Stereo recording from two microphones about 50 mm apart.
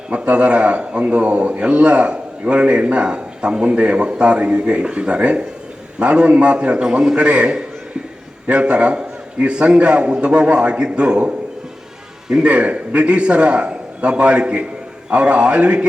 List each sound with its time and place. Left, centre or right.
0.1 s a man's voice: right
6.9 s a man's voice: centre
7.2 s a man's voice: right